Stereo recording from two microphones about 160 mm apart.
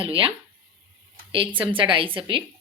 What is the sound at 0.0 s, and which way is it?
Speech, 35° right (ahead or behind).